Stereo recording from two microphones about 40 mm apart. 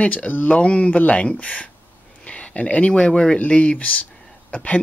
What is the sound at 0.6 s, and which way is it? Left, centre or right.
Speech, left.